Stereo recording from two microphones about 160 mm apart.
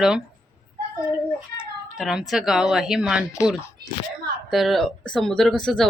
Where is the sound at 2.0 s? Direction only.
Centre (ahead or behind).